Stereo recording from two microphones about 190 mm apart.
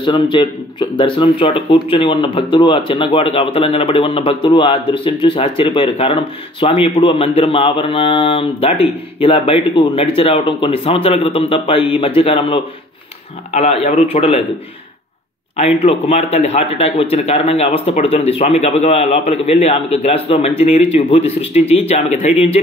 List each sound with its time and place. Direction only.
0.0 s a man's voice: 25° left (ahead or behind)
15.8 s a man's voice: 35° left (ahead or behind)